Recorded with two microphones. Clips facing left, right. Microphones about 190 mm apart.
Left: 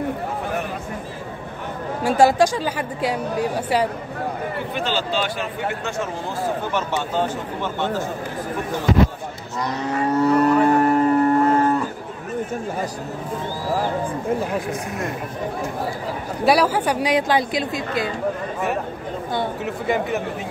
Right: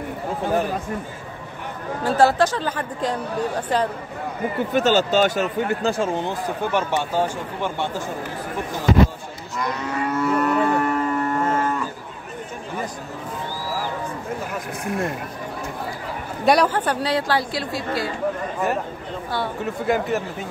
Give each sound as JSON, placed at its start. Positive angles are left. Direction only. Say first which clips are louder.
{"t": 2.0, "sound": "a woman's voice", "louder": "left 2 dB", "side_deg": 15}
{"t": 4.7, "sound": "speech", "louder": "right 7 dB", "side_deg": -45}
{"t": 7.2, "sound": "speech", "louder": "even", "side_deg": -10}
{"t": 9.6, "sound": "cattle", "louder": "left 2 dB", "side_deg": 35}
{"t": 16.4, "sound": "a woman's voice", "louder": "even", "side_deg": 5}
{"t": 19.6, "sound": "speech", "louder": "even", "side_deg": 0}